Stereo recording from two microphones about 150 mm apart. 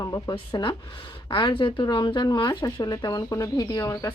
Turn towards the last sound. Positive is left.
turn(degrees=20)  # may be behind; listen again after turning